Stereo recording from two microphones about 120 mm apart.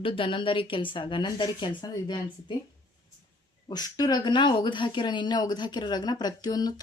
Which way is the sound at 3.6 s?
35° left (ahead or behind).